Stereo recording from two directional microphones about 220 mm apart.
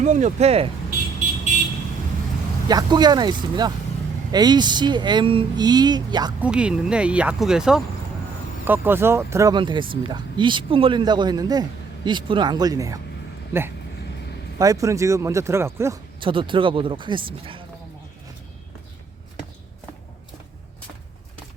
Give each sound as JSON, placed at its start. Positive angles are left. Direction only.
{"t": 0.0, "sound": "speech", "side_deg": -35}
{"t": 2.6, "sound": "speech", "side_deg": -20}
{"t": 6.4, "sound": "speech", "side_deg": -5}
{"t": 14.6, "sound": "speech", "side_deg": -15}